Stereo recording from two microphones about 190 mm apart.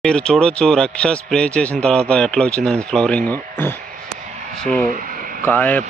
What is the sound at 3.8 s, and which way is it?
Vehicle, 45° right (ahead or behind).